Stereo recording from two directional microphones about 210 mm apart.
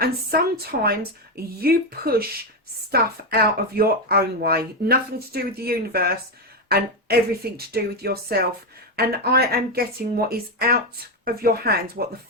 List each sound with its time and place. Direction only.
0.0 s speech: 50° right (ahead or behind)